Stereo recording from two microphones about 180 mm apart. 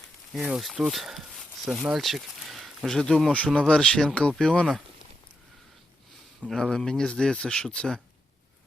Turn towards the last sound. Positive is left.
turn(degrees=5)  # may be behind; listen again after turning